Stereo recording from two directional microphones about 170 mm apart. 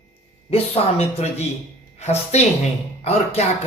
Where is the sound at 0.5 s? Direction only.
40° left (ahead or behind).